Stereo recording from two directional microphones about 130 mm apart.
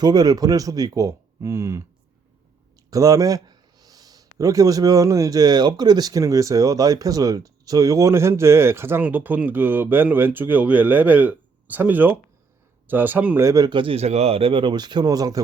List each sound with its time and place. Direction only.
0.0 s a man's voice: 30° right (ahead or behind)
2.9 s a man's voice: 25° right (ahead or behind)
13.7 s a man's voice: 40° right (ahead or behind)